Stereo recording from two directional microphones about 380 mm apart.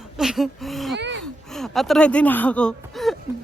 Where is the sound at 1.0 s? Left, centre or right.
Right.